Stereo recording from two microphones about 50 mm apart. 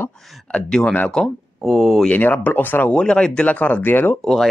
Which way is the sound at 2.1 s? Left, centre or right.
Left.